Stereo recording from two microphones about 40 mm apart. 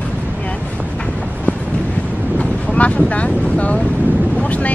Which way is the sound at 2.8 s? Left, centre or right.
Left.